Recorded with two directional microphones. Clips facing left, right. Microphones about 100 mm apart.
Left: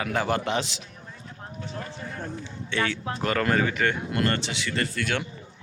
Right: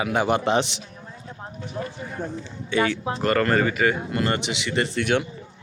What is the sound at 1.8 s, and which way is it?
Speech, 10° right (ahead or behind).